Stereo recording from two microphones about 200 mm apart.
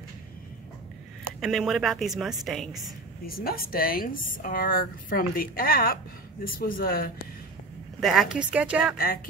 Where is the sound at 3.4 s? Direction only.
45° left (ahead or behind).